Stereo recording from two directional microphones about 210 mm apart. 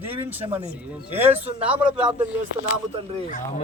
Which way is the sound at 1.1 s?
10° right (ahead or behind).